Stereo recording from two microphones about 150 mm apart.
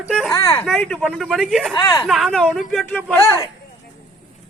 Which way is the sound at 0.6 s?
5° left (ahead or behind).